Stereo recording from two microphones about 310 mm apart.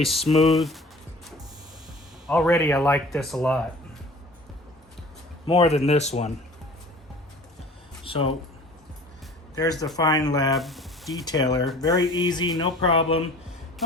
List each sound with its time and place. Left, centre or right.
0.0 s speech: centre
2.2 s speech: centre
5.5 s speech: centre
8.0 s speech: centre
10.0 s music: centre
10.5 s a sound: centre
11.3 s music: centre